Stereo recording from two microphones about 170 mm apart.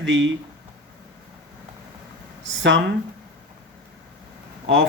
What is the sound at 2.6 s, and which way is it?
Speech, 90° right.